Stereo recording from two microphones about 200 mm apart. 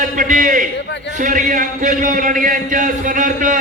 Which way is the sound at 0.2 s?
40° right (ahead or behind).